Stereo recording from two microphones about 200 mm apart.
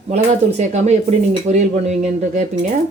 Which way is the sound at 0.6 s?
35° right (ahead or behind).